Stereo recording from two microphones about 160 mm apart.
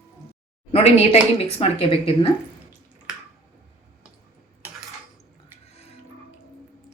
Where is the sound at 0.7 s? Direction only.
40° left (ahead or behind).